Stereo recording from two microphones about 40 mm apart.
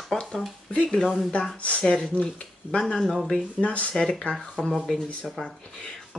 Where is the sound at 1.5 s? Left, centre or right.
Left.